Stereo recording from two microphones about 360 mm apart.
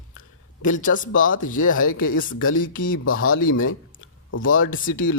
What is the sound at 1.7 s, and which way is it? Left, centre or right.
Speech, left.